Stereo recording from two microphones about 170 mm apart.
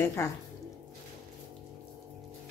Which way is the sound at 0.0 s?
15° left (ahead or behind).